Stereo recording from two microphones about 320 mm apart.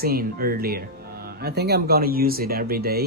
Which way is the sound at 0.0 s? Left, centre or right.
Right.